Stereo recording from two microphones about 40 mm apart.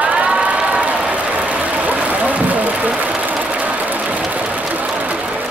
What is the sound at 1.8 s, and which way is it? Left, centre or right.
Vehicle, right.